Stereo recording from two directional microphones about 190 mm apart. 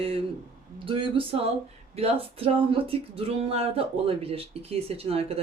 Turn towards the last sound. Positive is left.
turn(degrees=-30)  # may be behind; listen again after turning